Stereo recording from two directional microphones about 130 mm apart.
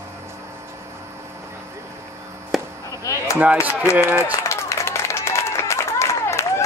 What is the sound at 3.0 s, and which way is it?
Chop, 25° left (ahead or behind).